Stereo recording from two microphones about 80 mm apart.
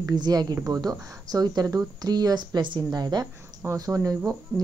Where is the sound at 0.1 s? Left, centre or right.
Right.